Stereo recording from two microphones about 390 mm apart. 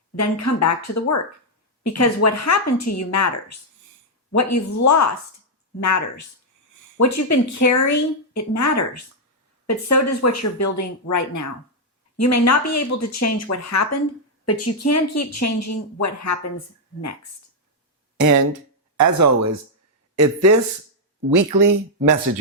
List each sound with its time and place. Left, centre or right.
0.2 s a woman's voice: left
18.2 s speech: right
21.2 s speech: right